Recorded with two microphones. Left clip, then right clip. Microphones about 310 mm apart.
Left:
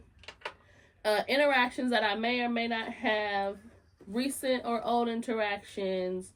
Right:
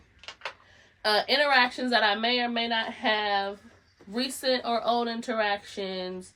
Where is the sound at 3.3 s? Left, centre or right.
Right.